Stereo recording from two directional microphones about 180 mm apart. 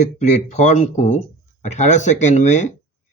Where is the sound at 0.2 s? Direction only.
40° left (ahead or behind).